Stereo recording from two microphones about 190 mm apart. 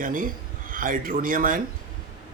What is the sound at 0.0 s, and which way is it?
Speech, 45° right (ahead or behind).